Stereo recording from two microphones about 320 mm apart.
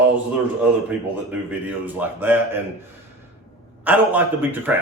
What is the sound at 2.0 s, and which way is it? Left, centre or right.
Speech, centre.